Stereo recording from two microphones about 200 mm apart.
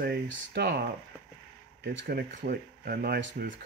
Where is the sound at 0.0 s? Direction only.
55° right (ahead or behind).